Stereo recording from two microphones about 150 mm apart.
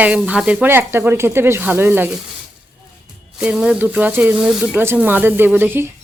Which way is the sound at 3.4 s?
5° right (ahead or behind).